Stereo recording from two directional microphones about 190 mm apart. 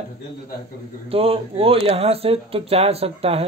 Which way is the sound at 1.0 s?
30° right (ahead or behind).